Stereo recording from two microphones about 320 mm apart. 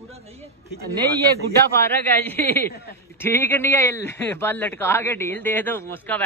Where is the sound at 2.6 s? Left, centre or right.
Left.